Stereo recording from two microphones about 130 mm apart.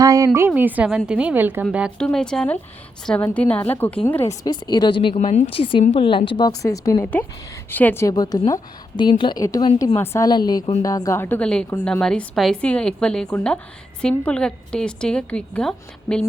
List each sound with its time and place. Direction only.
0.0 s a sound: 25° right (ahead or behind)
0.3 s a woman's voice: 15° right (ahead or behind)
2.0 s a woman's voice: 5° left (ahead or behind)
4.3 s a woman's voice: 30° left (ahead or behind)
5.1 s a woman's voice: 65° left (ahead or behind)
5.5 s a woman's voice: 40° left (ahead or behind); by 6.9 s 25° left (ahead or behind)
7.0 s a woman's voice: 10° left (ahead or behind)
8.0 s a woman's voice: 30° left (ahead or behind)
10.2 s a woman's voice: 30° left (ahead or behind); by 16.2 s 5° left (ahead or behind)